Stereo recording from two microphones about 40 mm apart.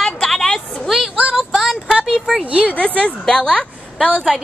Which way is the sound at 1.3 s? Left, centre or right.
Centre.